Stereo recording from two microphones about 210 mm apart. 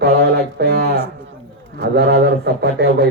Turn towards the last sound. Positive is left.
turn(degrees=-50)  # may be behind; listen again after turning